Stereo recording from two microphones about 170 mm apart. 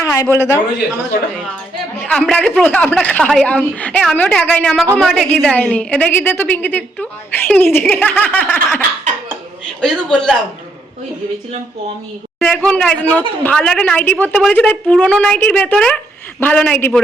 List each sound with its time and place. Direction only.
0.0 s a sound: 15° left (ahead or behind)
0.3 s a woman's voice: 15° left (ahead or behind)
2.0 s a woman's voice: 5° left (ahead or behind)
9.8 s a woman's voice: 5° left (ahead or behind)
12.4 s a woman's voice: 5° left (ahead or behind)